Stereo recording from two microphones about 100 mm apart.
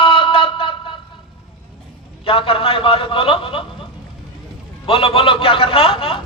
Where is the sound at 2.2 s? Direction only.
65° left (ahead or behind).